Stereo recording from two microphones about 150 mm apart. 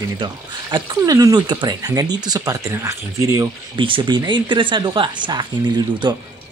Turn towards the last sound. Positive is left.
turn(degrees=-30)  # may be behind; listen again after turning